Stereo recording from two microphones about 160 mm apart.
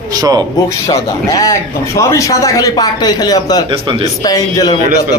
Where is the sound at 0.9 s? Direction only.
20° left (ahead or behind).